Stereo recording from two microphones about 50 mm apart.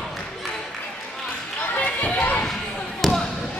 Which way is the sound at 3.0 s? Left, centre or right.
Centre.